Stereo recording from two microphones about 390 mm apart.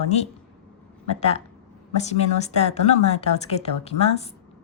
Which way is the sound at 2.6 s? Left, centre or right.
Centre.